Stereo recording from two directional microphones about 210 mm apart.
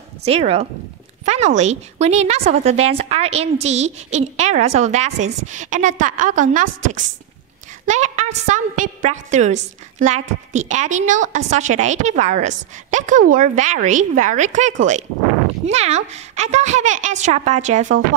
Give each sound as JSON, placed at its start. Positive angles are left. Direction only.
{"t": 0.2, "sound": "a woman's voice", "side_deg": -30}